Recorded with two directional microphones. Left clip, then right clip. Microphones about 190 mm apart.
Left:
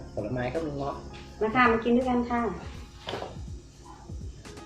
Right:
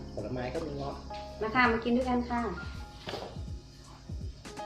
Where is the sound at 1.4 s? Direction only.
20° right (ahead or behind).